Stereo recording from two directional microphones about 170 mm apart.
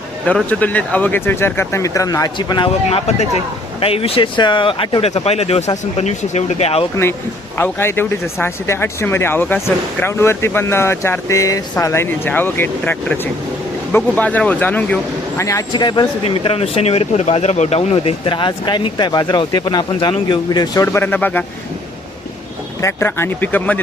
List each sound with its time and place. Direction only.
0.3 s speech: 10° left (ahead or behind); by 6.8 s 35° left (ahead or behind)
7.5 s speech: 15° left (ahead or behind)
22.8 s speech: 15° left (ahead or behind)